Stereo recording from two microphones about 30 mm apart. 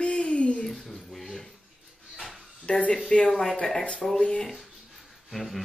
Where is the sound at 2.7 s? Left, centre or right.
Left.